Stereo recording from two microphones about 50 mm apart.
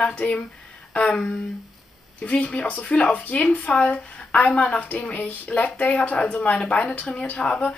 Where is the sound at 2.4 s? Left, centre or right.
Left.